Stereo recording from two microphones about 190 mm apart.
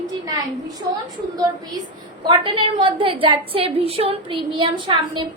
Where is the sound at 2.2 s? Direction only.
25° right (ahead or behind).